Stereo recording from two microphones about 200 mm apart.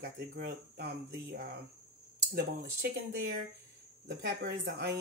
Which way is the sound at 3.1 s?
50° right (ahead or behind).